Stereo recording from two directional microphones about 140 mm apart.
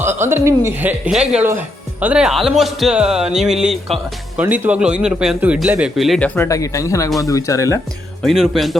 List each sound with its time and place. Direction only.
0.0 s speech: 15° right (ahead or behind)
6.1 s speech: 10° left (ahead or behind)
6.5 s speech: 25° left (ahead or behind)
8.2 s speech: centre (ahead or behind)